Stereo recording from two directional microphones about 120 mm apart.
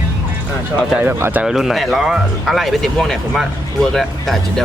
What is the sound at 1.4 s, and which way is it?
Speech, centre (ahead or behind).